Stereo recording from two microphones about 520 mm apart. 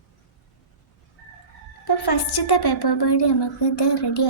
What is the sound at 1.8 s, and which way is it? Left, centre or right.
A woman's voice, left.